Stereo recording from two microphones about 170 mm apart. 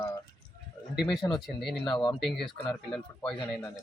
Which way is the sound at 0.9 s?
Centre (ahead or behind).